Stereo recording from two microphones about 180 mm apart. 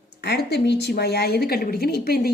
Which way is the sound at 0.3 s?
70° left (ahead or behind).